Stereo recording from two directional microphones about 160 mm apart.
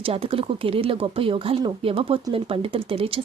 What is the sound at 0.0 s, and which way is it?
Speech, 35° right (ahead or behind).